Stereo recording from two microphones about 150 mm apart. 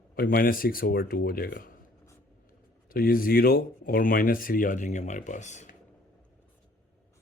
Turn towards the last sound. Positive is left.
turn(degrees=50)  # may be behind; listen again after turning